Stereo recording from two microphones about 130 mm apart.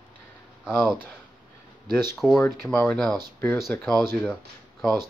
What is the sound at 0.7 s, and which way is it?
Speech, 10° right (ahead or behind).